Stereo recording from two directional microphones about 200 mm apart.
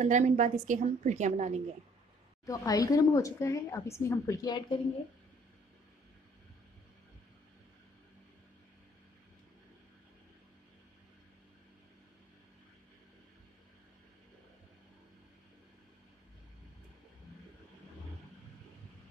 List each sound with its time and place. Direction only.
0.0 s a woman's voice: 35° right (ahead or behind)
2.4 s a woman's voice: 15° left (ahead or behind)